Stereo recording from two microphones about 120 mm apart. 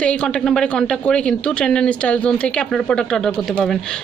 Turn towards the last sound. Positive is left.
turn(degrees=5)  # may be behind; listen again after turning